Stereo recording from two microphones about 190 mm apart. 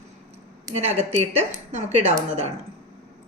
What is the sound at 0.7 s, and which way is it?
Speech, 35° right (ahead or behind).